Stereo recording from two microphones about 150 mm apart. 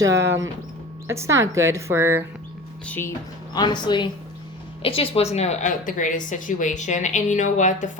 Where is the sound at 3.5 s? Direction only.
30° left (ahead or behind).